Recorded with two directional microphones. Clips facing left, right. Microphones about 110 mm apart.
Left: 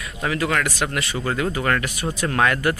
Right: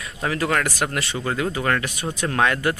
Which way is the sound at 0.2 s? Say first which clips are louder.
Even; 35° right (ahead or behind).